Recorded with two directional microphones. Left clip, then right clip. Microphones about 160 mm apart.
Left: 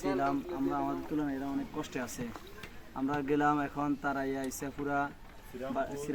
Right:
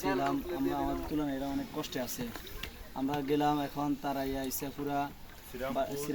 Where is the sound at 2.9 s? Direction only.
5° left (ahead or behind).